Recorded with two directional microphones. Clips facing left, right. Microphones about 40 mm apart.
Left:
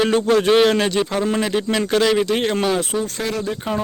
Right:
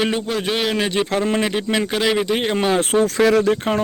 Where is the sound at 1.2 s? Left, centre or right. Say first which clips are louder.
Even; right.